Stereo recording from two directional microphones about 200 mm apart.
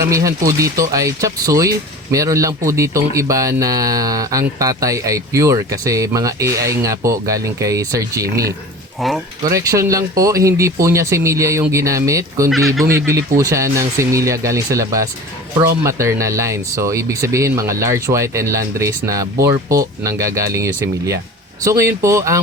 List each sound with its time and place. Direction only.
0.0 s speech: 15° right (ahead or behind)
9.0 s speech: centre (ahead or behind)
9.4 s speech: 15° right (ahead or behind)
12.5 s speech: centre (ahead or behind)
12.9 s speech: 15° right (ahead or behind)
19.6 s speech: 45° right (ahead or behind)
20.1 s speech: 15° right (ahead or behind)